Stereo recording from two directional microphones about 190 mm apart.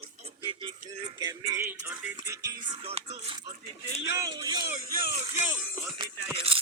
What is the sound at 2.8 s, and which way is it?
Speech, 30° right (ahead or behind).